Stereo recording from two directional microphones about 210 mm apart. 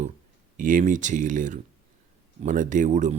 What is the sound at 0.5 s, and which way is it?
Speech, 40° right (ahead or behind).